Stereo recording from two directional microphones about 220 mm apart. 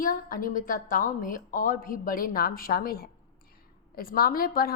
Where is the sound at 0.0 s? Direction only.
40° left (ahead or behind).